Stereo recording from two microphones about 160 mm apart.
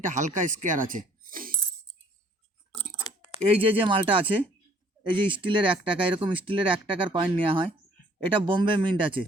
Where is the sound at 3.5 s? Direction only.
35° right (ahead or behind).